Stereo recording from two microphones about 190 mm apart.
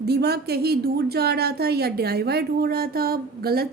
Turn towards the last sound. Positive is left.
turn(degrees=-55)  # may be behind; listen again after turning